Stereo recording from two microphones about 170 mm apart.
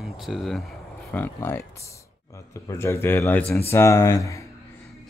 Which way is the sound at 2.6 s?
15° left (ahead or behind).